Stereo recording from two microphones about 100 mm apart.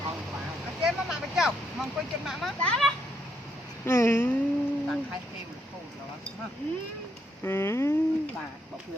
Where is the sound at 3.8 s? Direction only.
25° left (ahead or behind).